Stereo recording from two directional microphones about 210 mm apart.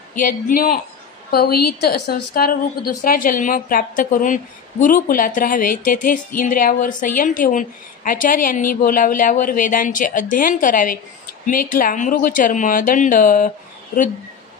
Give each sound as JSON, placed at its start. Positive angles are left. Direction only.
{"t": 0.2, "sound": "a man's voice", "side_deg": 40}